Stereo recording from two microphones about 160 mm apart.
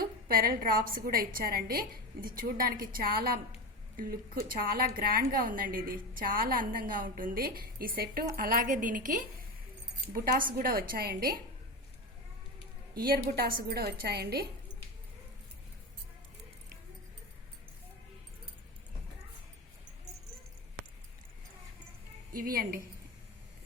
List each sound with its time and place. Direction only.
0.0 s a woman's voice: 65° right (ahead or behind)
12.9 s a woman's voice: 70° right (ahead or behind)
22.3 s a woman's voice: 65° right (ahead or behind)